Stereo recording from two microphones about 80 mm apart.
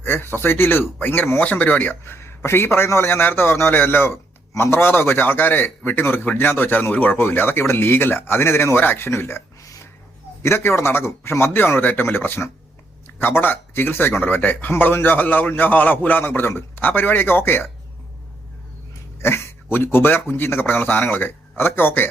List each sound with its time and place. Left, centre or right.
0.0 s speech: left
9.6 s a sound: left
10.4 s a man's voice: left
19.2 s a man's voice: left